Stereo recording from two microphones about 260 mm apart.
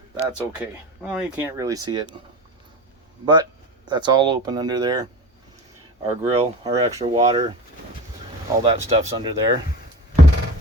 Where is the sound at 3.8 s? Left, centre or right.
Centre.